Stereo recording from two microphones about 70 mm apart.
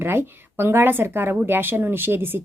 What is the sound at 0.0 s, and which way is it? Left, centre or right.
Speech, right.